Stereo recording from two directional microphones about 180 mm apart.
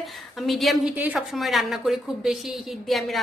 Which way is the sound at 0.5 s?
Centre (ahead or behind).